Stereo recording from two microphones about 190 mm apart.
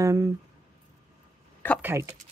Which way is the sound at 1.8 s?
15° right (ahead or behind).